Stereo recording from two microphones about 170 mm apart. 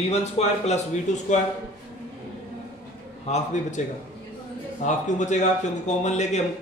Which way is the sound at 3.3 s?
45° left (ahead or behind).